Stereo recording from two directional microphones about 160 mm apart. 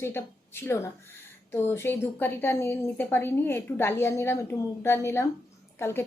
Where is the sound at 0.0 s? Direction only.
15° left (ahead or behind).